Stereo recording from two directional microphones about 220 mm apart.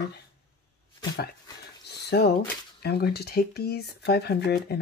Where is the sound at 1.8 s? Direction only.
50° left (ahead or behind).